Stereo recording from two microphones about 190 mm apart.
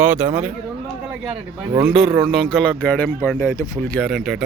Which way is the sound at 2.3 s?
5° left (ahead or behind).